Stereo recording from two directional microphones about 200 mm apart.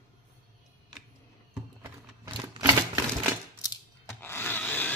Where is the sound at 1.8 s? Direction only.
15° right (ahead or behind).